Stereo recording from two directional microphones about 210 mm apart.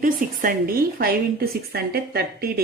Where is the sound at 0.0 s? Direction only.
45° right (ahead or behind).